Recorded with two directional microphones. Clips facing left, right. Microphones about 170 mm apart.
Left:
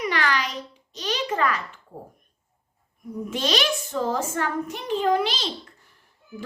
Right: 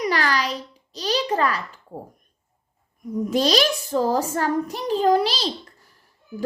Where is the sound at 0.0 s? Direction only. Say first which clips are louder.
Right 3 dB; 35° right (ahead or behind).